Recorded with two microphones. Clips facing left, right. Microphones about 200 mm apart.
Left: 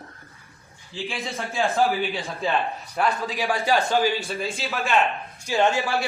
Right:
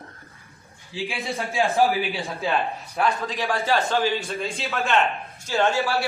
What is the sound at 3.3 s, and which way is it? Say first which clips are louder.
Speech: left 1 dB; 15° left (ahead or behind).